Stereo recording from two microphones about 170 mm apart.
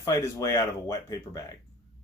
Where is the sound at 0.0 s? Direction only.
20° left (ahead or behind).